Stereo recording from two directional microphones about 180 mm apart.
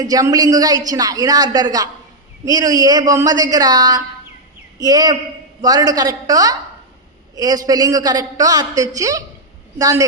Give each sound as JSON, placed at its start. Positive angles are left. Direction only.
{"t": 0.0, "sound": "a man's voice", "side_deg": -20}